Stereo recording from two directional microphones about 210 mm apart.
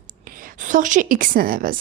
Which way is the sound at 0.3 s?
40° right (ahead or behind).